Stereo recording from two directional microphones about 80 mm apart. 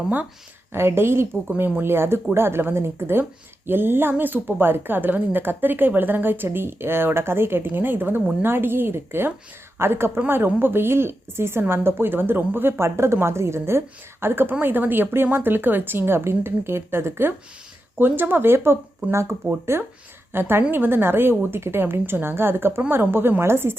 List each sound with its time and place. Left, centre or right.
0.7 s a woman's voice: right